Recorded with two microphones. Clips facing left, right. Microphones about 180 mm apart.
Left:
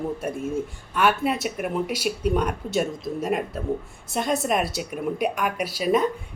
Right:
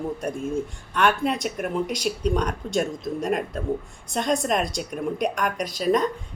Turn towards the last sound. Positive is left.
turn(degrees=5)  # may be behind; listen again after turning